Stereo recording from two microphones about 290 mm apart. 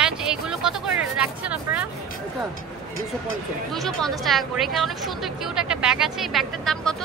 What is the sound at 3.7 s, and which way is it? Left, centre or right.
A woman's voice, centre.